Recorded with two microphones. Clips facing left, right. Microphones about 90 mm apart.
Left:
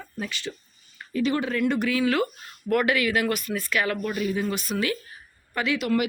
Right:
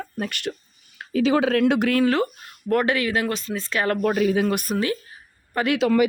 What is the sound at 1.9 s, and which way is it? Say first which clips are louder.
Speech: right 3 dB; 40° right (ahead or behind).